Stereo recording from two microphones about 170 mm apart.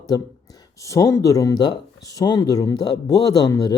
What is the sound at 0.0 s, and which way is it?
Speech, 20° left (ahead or behind).